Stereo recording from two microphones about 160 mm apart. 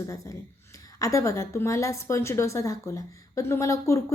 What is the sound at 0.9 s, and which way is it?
A woman's voice, 20° left (ahead or behind).